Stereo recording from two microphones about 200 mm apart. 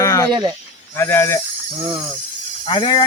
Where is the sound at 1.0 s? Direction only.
15° left (ahead or behind).